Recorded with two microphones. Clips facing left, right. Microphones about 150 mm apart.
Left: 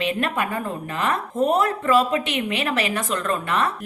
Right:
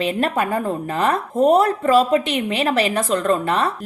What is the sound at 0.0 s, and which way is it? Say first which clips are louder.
A woman's voice: right 4 dB; 35° right (ahead or behind).